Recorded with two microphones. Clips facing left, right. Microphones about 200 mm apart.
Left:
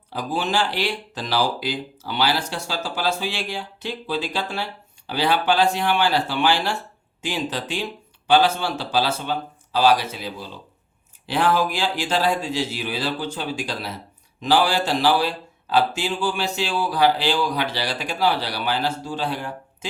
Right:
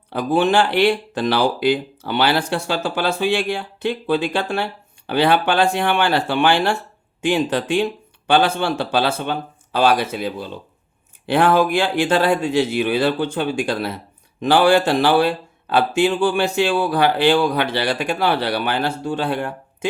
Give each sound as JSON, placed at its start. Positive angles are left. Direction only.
{"t": 0.1, "sound": "speech", "side_deg": -55}